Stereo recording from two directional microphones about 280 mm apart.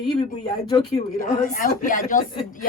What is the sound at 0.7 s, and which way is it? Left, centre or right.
Speech, centre.